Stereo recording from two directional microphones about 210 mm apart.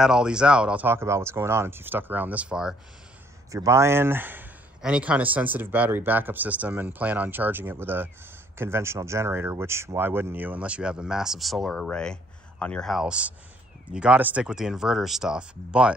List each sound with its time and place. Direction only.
0.0 s speech: 5° right (ahead or behind)